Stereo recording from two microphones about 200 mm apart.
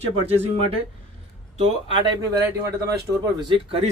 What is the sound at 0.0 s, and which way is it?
Speech, 30° right (ahead or behind).